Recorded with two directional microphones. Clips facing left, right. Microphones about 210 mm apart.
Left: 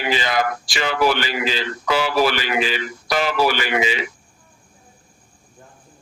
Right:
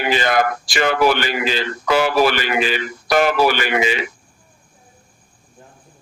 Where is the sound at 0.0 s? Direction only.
55° right (ahead or behind).